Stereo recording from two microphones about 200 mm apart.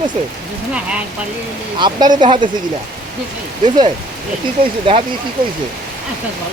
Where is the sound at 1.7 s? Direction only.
25° right (ahead or behind).